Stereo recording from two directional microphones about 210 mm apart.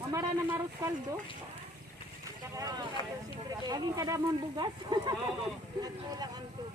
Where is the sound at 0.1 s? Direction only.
15° right (ahead or behind).